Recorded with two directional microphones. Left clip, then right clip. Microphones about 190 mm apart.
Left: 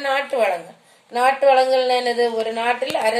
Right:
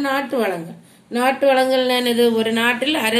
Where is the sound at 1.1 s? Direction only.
Centre (ahead or behind).